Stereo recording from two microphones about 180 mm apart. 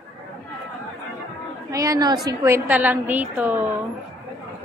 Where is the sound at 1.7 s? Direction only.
20° right (ahead or behind).